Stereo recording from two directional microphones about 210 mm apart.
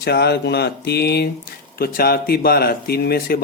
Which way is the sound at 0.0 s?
50° left (ahead or behind).